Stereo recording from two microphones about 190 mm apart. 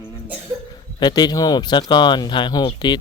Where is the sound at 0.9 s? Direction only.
20° left (ahead or behind).